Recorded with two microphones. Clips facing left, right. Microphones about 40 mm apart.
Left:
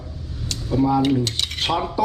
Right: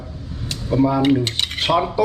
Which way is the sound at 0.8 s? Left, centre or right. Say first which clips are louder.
Right 2 dB; right.